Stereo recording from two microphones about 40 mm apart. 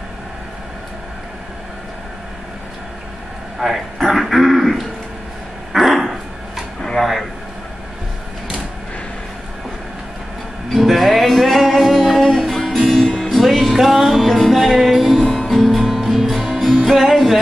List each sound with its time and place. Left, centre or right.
3.5 s a man's voice: centre
5.7 s dog: centre
7.0 s a sound: centre
10.7 s music: centre
15.2 s music: centre
15.5 s music: centre